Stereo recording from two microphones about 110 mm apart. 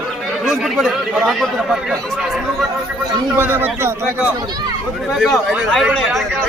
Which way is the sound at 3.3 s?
15° right (ahead or behind).